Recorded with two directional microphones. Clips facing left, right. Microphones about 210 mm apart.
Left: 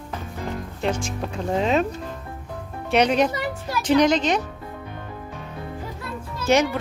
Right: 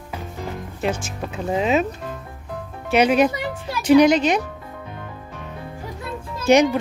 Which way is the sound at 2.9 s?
5° right (ahead or behind).